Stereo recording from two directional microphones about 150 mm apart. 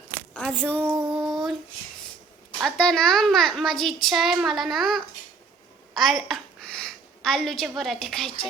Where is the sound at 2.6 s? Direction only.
5° left (ahead or behind).